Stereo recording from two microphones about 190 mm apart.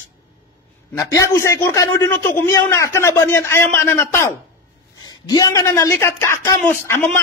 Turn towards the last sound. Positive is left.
turn(degrees=10)  # may be behind; listen again after turning